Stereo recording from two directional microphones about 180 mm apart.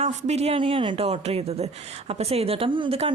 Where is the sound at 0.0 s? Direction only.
35° right (ahead or behind).